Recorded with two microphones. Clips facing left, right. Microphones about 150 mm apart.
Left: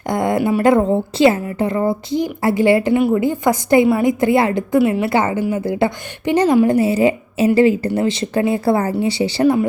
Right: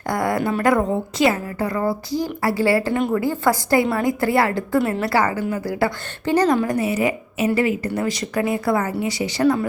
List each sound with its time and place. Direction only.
0.1 s a woman's voice: 20° left (ahead or behind)